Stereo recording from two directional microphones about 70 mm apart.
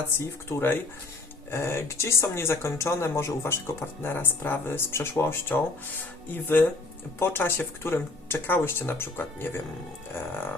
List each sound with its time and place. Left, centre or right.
0.2 s speech: left